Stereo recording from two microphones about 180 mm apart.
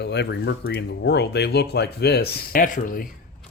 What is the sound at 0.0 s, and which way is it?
Speech, 70° left (ahead or behind).